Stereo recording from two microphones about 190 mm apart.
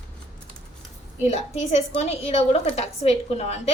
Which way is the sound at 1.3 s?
35° left (ahead or behind).